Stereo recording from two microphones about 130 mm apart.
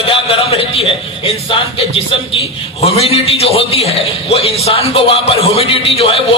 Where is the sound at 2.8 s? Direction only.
50° left (ahead or behind).